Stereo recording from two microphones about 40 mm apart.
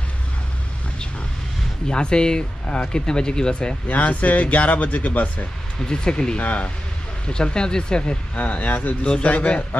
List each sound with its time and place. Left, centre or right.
1.9 s speech: left
3.8 s speech: left
5.9 s speech: centre
6.3 s speech: left
7.2 s speech: left
8.4 s speech: left